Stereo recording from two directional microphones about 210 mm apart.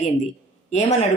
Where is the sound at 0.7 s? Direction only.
30° left (ahead or behind).